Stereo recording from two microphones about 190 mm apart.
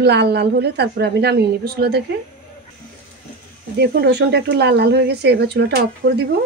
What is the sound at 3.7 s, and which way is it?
A woman's voice, 60° right (ahead or behind).